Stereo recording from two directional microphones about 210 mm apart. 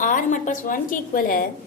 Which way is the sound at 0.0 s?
40° left (ahead or behind).